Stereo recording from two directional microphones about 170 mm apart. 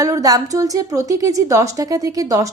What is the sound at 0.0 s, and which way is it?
A woman's voice, 20° right (ahead or behind).